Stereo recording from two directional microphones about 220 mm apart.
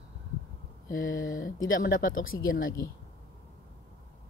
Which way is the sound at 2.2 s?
65° left (ahead or behind).